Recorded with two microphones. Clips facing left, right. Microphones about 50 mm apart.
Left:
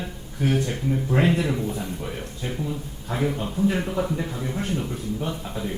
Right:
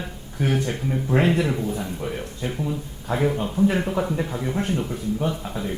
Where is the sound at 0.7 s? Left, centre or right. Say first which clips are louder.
Right 1 dB; centre.